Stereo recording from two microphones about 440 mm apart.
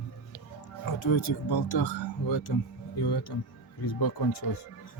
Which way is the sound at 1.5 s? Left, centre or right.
Left.